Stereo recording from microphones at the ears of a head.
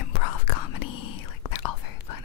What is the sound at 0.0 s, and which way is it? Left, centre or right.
Whispering, left.